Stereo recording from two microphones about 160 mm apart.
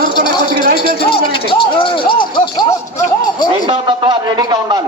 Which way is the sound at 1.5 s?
30° left (ahead or behind).